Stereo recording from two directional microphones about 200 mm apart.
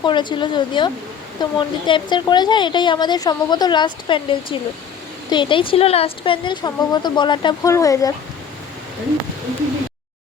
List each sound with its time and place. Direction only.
0.0 s a woman's voice: 25° left (ahead or behind)